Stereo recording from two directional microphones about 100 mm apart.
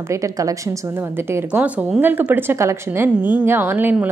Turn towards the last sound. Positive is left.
turn(degrees=-20)  # may be behind; listen again after turning